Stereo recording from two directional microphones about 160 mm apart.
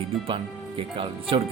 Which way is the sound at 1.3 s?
30° right (ahead or behind).